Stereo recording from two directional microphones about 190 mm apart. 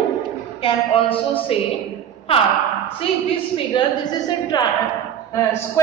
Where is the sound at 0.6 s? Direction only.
30° left (ahead or behind).